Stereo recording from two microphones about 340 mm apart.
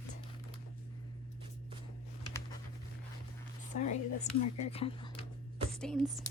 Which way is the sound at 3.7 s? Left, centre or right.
Left.